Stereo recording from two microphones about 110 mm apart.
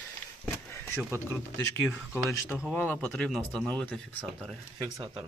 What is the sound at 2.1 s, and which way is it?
Speech, 20° left (ahead or behind).